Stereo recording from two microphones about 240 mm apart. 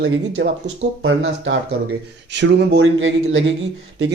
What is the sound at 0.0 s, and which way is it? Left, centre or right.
Speech, right.